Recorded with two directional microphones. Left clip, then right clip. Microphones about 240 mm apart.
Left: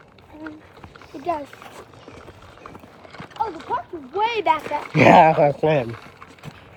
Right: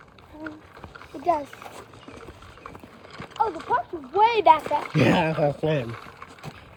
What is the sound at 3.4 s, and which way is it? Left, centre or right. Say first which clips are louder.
Speech: right 1 dB; right.